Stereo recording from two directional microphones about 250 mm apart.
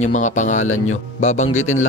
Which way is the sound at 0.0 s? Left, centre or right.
Left.